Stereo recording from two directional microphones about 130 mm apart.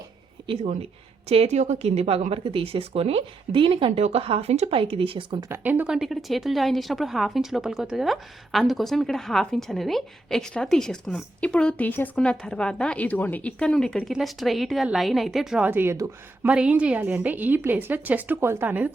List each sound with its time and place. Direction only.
0.6 s speech: 60° right (ahead or behind); by 5.5 s 40° right (ahead or behind)
5.5 s a woman's voice: 15° right (ahead or behind)